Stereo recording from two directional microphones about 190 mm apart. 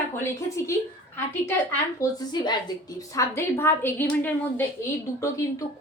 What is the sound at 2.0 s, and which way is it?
A woman's voice, 20° left (ahead or behind).